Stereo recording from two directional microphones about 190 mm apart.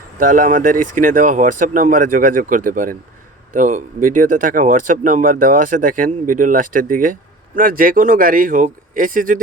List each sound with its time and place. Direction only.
0.2 s speech: 45° right (ahead or behind)